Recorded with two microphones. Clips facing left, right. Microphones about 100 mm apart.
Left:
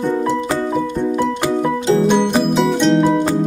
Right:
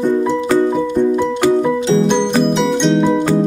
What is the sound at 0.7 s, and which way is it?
Music, centre (ahead or behind).